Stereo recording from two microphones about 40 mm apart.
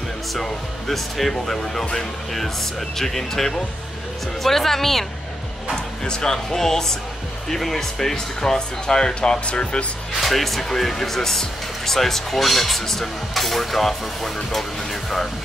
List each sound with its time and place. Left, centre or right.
0.3 s speech: centre
6.0 s speech: centre
10.1 s speech: centre